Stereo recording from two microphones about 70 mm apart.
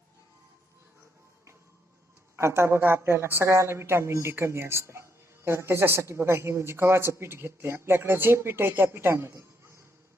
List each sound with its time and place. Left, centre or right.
2.3 s speech: right